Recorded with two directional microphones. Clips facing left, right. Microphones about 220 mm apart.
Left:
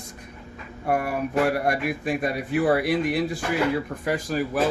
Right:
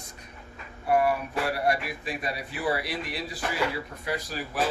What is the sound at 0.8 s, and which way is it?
Speech, 50° left (ahead or behind).